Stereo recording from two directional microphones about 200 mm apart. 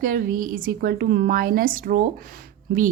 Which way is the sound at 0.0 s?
45° right (ahead or behind).